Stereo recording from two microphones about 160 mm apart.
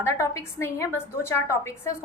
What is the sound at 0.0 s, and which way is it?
A woman's voice, 15° left (ahead or behind).